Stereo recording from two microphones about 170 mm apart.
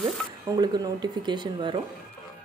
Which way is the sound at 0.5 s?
25° right (ahead or behind).